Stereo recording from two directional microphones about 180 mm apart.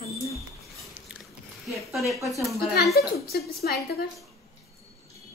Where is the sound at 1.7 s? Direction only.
Centre (ahead or behind).